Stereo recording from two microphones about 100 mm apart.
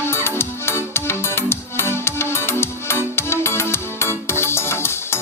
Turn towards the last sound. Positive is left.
turn(degrees=25)  # may be behind; listen again after turning